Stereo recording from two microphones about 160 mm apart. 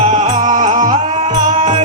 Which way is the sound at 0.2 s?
50° right (ahead or behind).